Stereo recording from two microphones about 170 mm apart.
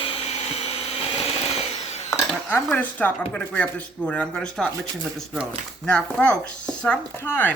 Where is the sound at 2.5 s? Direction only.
10° left (ahead or behind).